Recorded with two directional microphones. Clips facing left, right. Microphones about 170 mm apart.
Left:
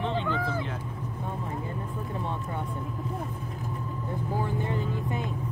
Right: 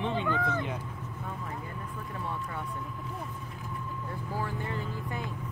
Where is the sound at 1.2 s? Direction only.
30° left (ahead or behind).